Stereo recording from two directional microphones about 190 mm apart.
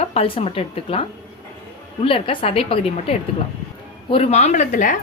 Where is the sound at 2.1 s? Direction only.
30° left (ahead or behind).